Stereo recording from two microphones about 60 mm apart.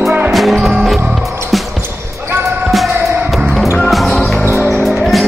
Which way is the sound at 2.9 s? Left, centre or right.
Right.